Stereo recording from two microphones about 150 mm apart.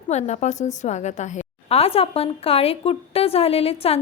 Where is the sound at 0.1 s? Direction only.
50° left (ahead or behind).